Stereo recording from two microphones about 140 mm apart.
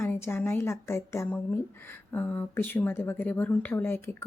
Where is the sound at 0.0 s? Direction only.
15° left (ahead or behind).